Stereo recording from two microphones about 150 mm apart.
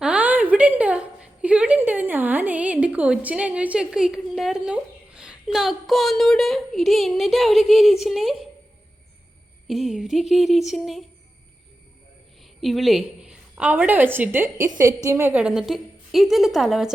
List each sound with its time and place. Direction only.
0.0 s a sound: 10° right (ahead or behind)
9.6 s a woman's voice: centre (ahead or behind)
12.6 s a woman's voice: centre (ahead or behind)